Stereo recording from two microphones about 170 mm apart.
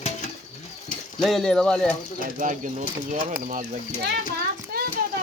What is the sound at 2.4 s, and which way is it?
Speech, 50° right (ahead or behind).